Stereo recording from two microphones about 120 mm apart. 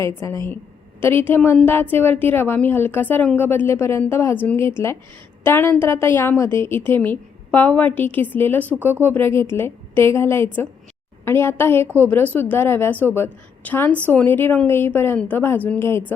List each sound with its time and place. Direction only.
0.0 s a woman's voice: 20° left (ahead or behind)